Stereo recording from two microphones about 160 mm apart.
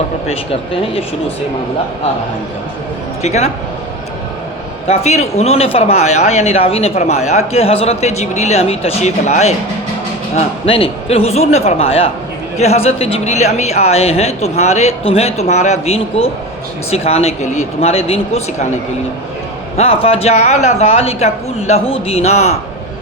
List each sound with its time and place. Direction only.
0.3 s speech: 35° left (ahead or behind)
3.2 s speech: 45° left (ahead or behind)
4.9 s speech: 40° left (ahead or behind)